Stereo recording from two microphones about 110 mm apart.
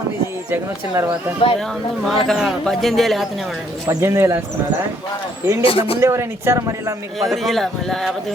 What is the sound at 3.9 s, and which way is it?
Speech, 25° right (ahead or behind).